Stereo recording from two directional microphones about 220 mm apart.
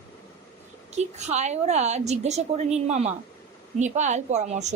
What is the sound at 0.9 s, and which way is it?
A woman's voice, 30° right (ahead or behind).